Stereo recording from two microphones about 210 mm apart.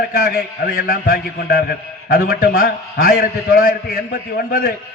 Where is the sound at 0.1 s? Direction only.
45° left (ahead or behind).